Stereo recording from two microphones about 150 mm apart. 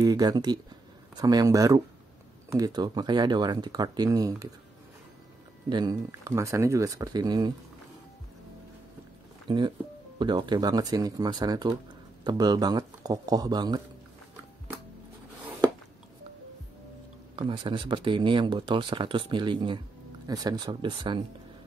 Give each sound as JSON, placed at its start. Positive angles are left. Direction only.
{"t": 0.0, "sound": "speech", "side_deg": -25}
{"t": 5.7, "sound": "speech", "side_deg": -25}
{"t": 9.5, "sound": "speech", "side_deg": -30}
{"t": 17.4, "sound": "speech", "side_deg": -35}